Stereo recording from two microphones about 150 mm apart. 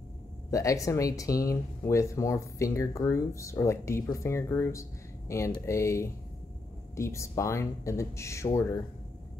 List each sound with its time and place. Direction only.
0.5 s speech: 20° left (ahead or behind)